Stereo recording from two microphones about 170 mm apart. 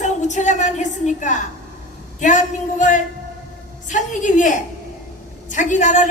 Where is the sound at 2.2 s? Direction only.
50° left (ahead or behind).